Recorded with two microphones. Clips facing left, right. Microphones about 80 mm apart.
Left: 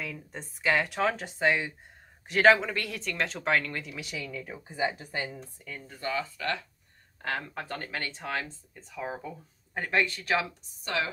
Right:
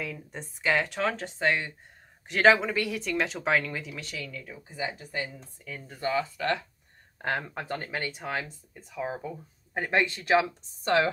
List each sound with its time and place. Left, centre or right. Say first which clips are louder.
0.0 s speech: right 2 dB; centre
4.0 s speech: left 1 dB; centre
5.9 s speech: right 4 dB; right
10.8 s speech: right 7 dB; right